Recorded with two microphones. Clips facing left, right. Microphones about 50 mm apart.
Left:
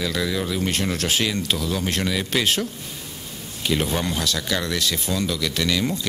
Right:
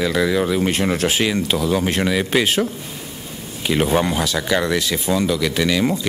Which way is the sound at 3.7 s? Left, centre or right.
Right.